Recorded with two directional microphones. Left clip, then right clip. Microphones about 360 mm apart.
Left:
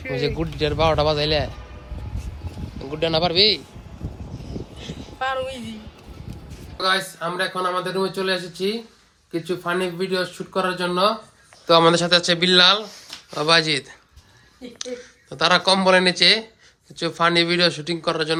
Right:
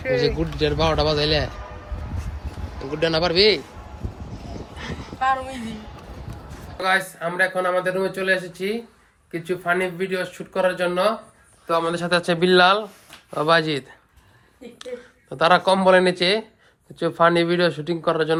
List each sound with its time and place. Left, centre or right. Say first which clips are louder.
0.0 s a man's voice: right 4 dB; centre
2.1 s a sound: right 2 dB; centre
4.8 s a woman's voice: right 3 dB; centre
9.6 s speech: right 3 dB; centre
11.7 s speech: left 7 dB; left
11.9 s a man's voice: left 3 dB; centre
15.3 s a man's voice: right 1 dB; centre